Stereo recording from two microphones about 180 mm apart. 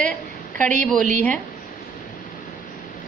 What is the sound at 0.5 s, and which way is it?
Speech, 45° right (ahead or behind).